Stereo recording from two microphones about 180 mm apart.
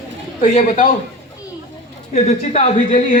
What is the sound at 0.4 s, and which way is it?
Speech, 45° left (ahead or behind).